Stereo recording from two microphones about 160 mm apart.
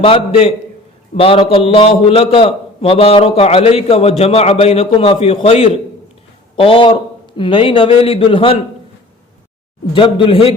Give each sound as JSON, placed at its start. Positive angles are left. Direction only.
{"t": 0.0, "sound": "a man's voice", "side_deg": 35}
{"t": 9.9, "sound": "a man's voice", "side_deg": 30}